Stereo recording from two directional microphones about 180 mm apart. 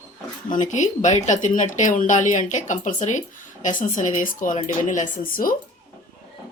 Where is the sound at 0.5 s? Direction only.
45° left (ahead or behind).